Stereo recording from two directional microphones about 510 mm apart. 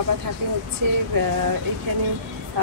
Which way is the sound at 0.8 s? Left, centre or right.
Right.